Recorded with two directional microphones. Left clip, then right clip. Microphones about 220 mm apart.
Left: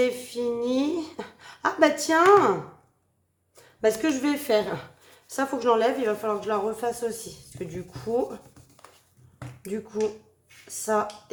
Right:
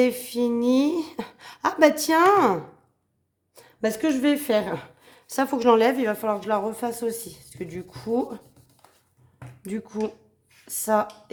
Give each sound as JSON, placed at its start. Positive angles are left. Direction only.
{"t": 0.0, "sound": "speech", "side_deg": -45}
{"t": 9.6, "sound": "speech", "side_deg": -45}